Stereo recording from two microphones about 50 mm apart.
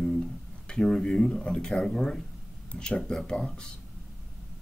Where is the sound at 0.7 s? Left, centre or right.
Centre.